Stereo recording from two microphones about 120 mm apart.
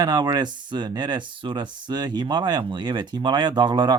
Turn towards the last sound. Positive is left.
turn(degrees=-40)  # may be behind; listen again after turning